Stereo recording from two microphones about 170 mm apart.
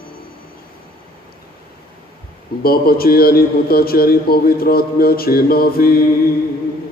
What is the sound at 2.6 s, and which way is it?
A man's voice, 60° left (ahead or behind).